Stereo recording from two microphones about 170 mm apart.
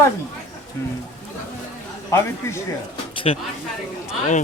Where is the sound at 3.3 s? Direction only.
40° left (ahead or behind).